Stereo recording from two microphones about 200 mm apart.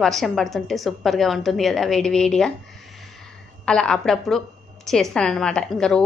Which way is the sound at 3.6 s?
5° left (ahead or behind).